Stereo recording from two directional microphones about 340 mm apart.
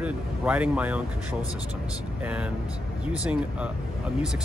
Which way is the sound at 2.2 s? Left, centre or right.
Centre.